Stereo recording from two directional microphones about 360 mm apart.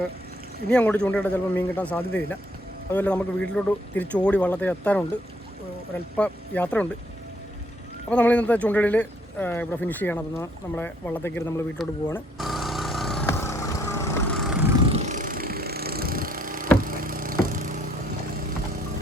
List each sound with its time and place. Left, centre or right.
0.7 s a man's voice: centre
6.1 s a man's voice: centre
8.1 s speech: centre
14.5 s vehicle: centre
14.9 s vehicle: centre